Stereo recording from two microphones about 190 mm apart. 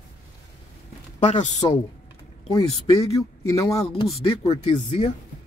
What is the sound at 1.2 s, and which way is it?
Speech, 35° left (ahead or behind).